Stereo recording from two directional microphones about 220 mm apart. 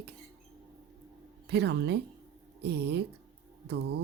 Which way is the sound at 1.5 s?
50° right (ahead or behind).